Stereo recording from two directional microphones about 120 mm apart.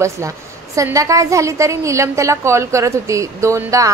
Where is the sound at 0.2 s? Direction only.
25° right (ahead or behind).